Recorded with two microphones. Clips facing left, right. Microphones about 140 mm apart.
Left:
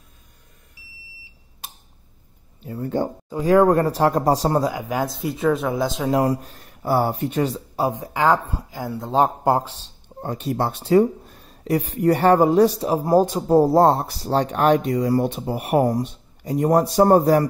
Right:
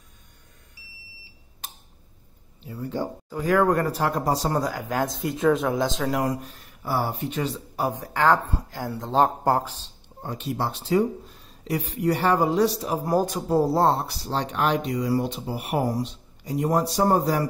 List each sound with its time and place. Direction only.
2.6 s speech: 50° left (ahead or behind)
3.4 s speech: 30° left (ahead or behind)
4.6 s speech: 15° left (ahead or behind)
6.0 s speech: 30° left (ahead or behind)
6.5 s speech: 45° left (ahead or behind)
7.9 s speech: 15° left (ahead or behind)
10.0 s speech: 45° left (ahead or behind)
12.8 s a man's voice: 30° left (ahead or behind)
13.5 s speech: 45° left (ahead or behind)